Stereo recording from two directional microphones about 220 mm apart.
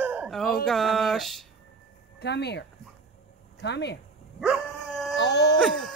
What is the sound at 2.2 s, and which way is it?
Speech, 50° left (ahead or behind).